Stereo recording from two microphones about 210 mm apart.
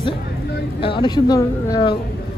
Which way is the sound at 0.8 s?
25° left (ahead or behind).